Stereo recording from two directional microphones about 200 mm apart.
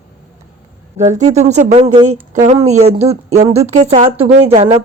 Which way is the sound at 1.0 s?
35° right (ahead or behind).